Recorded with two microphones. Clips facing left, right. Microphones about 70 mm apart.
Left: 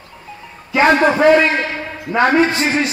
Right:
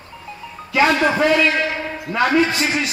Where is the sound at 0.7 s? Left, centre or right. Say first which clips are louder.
Left 3 dB; left.